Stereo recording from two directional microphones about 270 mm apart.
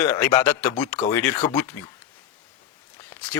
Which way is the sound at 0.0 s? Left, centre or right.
Centre.